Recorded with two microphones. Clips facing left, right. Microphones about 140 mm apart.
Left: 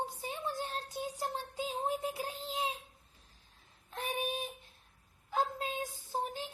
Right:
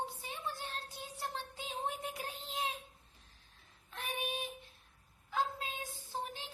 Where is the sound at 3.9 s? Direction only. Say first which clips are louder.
Left 4 dB; 40° left (ahead or behind).